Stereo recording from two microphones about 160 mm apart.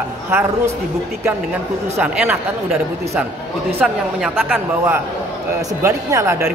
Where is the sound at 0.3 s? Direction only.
15° right (ahead or behind).